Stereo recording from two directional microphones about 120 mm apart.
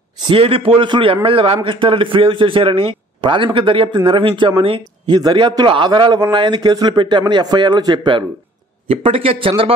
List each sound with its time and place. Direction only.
0.3 s a man's voice: 50° right (ahead or behind)
5.0 s a man's voice: 35° right (ahead or behind); by 9.5 s 50° right (ahead or behind)